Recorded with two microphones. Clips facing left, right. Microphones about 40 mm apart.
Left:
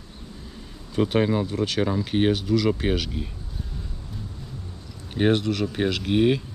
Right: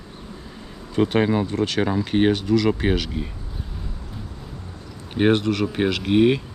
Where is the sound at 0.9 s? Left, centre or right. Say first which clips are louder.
Right 2 dB; centre.